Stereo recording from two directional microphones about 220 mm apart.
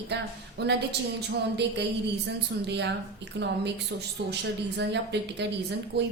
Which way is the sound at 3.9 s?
50° right (ahead or behind).